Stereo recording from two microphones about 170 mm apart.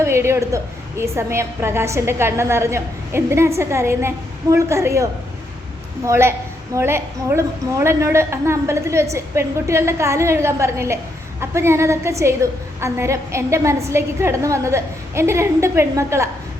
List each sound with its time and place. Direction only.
0.0 s a woman's voice: 15° right (ahead or behind)
6.1 s a woman's voice: 15° right (ahead or behind)